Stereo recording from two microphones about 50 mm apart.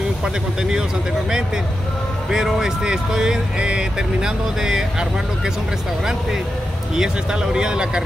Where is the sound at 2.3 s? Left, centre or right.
Centre.